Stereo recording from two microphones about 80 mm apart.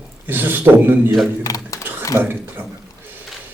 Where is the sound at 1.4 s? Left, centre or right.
Left.